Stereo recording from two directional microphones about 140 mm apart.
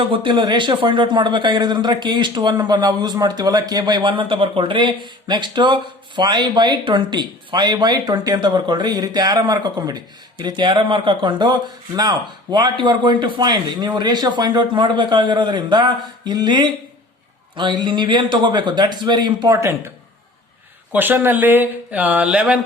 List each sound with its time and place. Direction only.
0.1 s speech: 35° right (ahead or behind); by 19.9 s 20° right (ahead or behind)
20.9 s speech: 15° right (ahead or behind)